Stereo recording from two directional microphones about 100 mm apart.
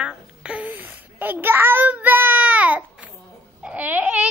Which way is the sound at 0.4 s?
10° right (ahead or behind).